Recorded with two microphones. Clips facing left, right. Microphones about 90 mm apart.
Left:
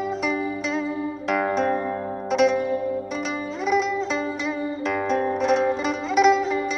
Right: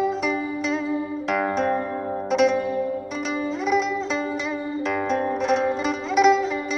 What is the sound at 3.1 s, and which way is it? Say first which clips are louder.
Music: right 2 dB; centre (ahead or behind).